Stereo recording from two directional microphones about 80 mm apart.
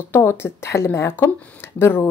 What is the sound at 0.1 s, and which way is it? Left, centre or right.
A woman's voice, left.